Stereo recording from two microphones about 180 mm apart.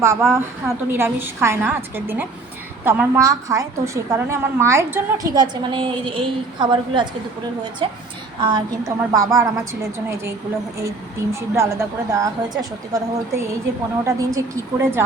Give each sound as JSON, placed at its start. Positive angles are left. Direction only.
{"t": 0.0, "sound": "a woman's voice", "side_deg": -15}
{"t": 10.8, "sound": "a woman's voice", "side_deg": -15}